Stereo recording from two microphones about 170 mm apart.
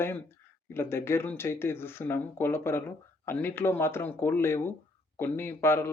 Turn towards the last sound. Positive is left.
turn(degrees=15)  # may be behind; listen again after turning